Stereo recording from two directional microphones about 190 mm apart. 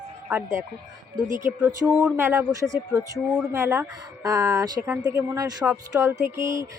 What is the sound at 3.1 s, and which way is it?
Speech, centre (ahead or behind).